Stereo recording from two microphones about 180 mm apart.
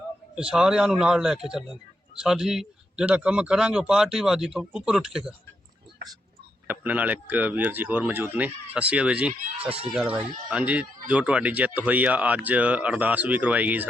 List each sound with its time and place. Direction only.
0.3 s a man's voice: 5° right (ahead or behind)
6.7 s speech: 10° right (ahead or behind)
9.6 s speech: 30° right (ahead or behind)
9.9 s speech: 5° right (ahead or behind)